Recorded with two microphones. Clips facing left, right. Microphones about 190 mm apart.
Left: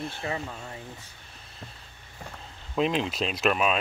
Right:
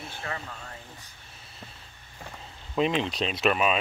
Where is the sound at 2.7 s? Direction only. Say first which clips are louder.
Even; centre (ahead or behind).